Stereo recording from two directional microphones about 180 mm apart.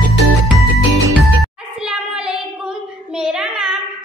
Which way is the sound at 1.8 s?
5° right (ahead or behind).